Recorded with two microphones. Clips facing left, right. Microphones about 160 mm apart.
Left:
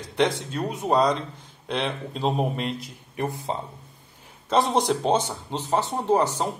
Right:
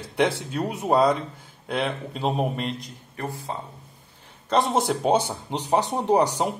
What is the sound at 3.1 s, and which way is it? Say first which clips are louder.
Speech: left 4 dB; 20° left (ahead or behind).